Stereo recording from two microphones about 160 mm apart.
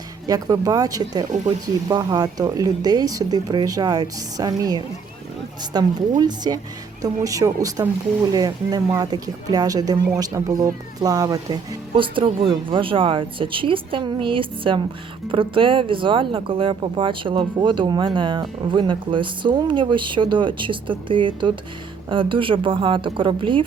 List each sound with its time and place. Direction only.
0.3 s speech: 25° right (ahead or behind)